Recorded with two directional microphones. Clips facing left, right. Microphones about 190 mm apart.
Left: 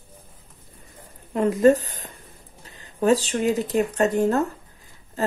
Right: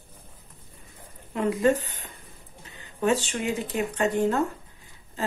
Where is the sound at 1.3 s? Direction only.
40° left (ahead or behind).